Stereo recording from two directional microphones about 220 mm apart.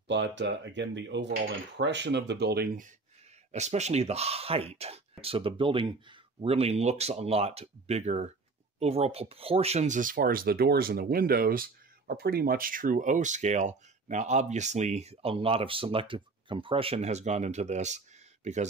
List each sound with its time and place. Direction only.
0.1 s speech: 55° right (ahead or behind)
3.5 s speech: 30° right (ahead or behind)